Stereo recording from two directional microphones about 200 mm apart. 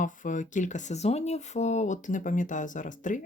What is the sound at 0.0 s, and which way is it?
Speech, 40° left (ahead or behind).